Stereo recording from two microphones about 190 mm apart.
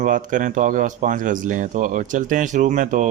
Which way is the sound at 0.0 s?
45° right (ahead or behind).